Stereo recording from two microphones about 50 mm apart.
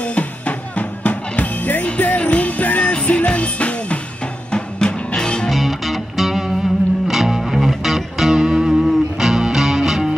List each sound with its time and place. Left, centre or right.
0.0 s music: left
5.5 s music: centre